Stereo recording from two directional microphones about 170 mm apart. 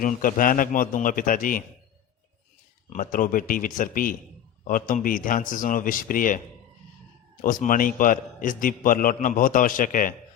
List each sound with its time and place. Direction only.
0.0 s a man's voice: 55° left (ahead or behind)
2.9 s a man's voice: 55° left (ahead or behind)
7.4 s a man's voice: 55° left (ahead or behind)